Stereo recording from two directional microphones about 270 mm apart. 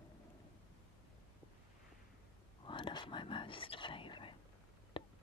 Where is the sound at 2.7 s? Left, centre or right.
Centre.